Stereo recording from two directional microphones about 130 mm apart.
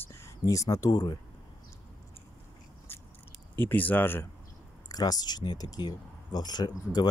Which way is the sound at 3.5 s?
15° left (ahead or behind).